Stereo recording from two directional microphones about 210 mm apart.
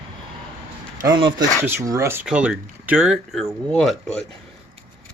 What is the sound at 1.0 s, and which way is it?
Speech, 20° right (ahead or behind).